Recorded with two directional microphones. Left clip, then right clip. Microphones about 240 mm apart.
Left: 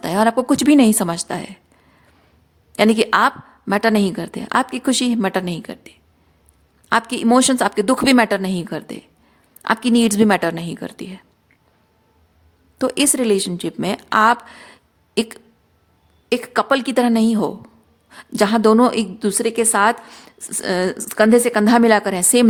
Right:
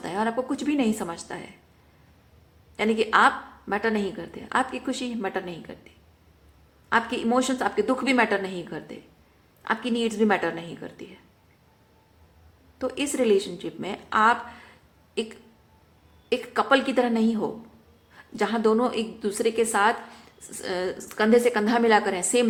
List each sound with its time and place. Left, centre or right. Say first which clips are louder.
0.0 s a woman's voice: left 10 dB; left
2.7 s a woman's voice: left 6 dB; left
6.9 s a woman's voice: left 7 dB; left
12.8 s a woman's voice: left 7 dB; left